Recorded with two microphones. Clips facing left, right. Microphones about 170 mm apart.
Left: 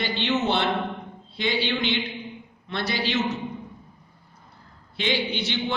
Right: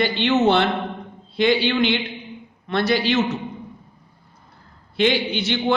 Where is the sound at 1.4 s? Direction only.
70° right (ahead or behind).